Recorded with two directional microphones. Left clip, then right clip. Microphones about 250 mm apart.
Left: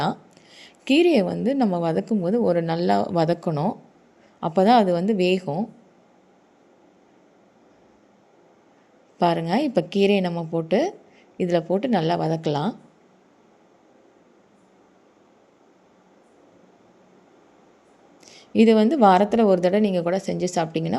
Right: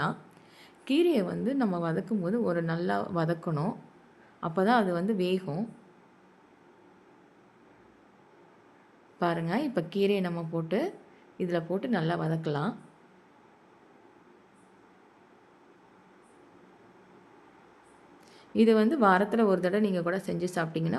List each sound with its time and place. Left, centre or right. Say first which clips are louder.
0.0 s a woman's voice: left 6 dB; centre
9.1 s a woman's voice: left 8 dB; centre
18.3 s a woman's voice: left 6 dB; centre